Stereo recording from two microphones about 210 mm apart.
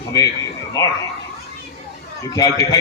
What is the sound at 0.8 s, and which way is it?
Speech, 15° left (ahead or behind).